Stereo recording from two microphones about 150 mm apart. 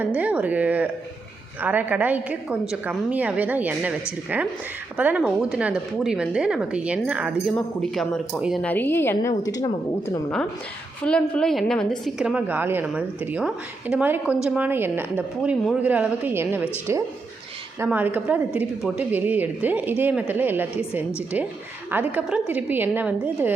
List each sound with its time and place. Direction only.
0.0 s speech: 10° right (ahead or behind)
4.9 s speech: 10° right (ahead or behind)
7.5 s a woman's voice: 5° left (ahead or behind)
8.6 s a woman's voice: 10° left (ahead or behind)
11.0 s a woman's voice: 5° left (ahead or behind)
12.2 s speech: 10° right (ahead or behind)